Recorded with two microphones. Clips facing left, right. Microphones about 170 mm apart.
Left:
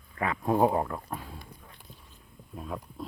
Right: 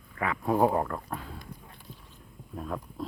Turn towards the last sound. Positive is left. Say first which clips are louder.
# right 2 dB
turn(degrees=0)  # may be behind; listen again after turning